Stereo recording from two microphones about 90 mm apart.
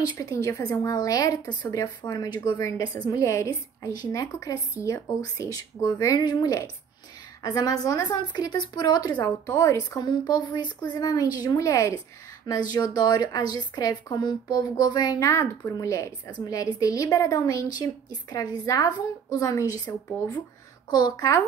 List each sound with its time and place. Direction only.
0.0 s a woman's voice: 40° left (ahead or behind)
3.1 s a woman's voice: 35° left (ahead or behind)
9.5 s a woman's voice: 35° left (ahead or behind)
20.9 s a woman's voice: 50° left (ahead or behind)